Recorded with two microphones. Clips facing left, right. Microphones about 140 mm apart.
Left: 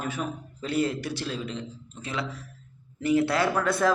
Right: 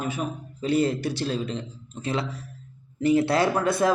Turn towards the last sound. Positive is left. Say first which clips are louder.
# right 2 dB
turn(degrees=-15)  # may be behind; listen again after turning